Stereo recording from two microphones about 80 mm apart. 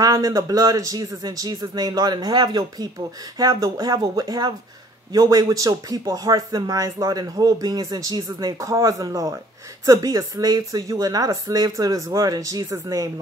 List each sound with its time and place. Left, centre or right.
0.0 s speech: right